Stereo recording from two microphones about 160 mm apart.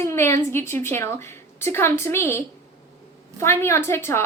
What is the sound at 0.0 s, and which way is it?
A woman's voice, 15° left (ahead or behind).